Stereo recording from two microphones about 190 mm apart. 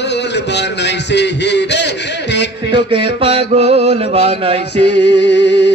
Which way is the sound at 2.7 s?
25° right (ahead or behind).